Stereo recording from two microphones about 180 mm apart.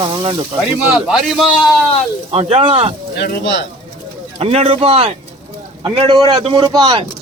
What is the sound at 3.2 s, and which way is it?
Speech, 80° left.